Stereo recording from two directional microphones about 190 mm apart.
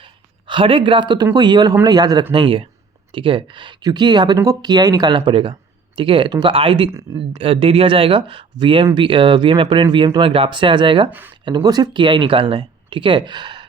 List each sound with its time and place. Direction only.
0.0 s speech: 25° right (ahead or behind)